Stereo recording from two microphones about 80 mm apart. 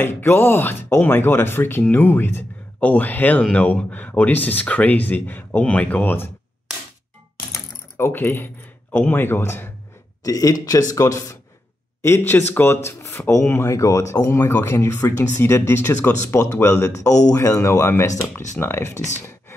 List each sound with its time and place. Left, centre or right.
0.0 s speech: left
8.1 s speech: left
10.2 s speech: left
12.0 s speech: left
13.7 s speech: left